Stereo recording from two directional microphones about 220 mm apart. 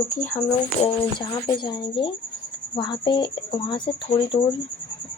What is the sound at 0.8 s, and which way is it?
Speech, 20° left (ahead or behind).